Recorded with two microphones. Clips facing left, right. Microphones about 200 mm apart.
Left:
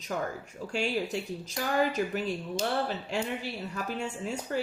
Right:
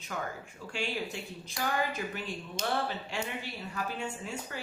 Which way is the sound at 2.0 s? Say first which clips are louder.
Left 7 dB; 45° left (ahead or behind).